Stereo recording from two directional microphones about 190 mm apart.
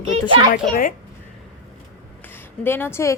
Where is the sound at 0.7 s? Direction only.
45° left (ahead or behind).